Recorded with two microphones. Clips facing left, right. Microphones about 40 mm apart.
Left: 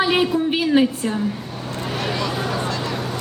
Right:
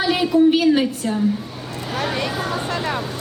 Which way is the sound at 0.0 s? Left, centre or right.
Left.